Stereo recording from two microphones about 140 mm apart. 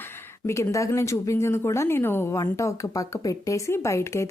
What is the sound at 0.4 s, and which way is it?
A woman's voice, 20° left (ahead or behind).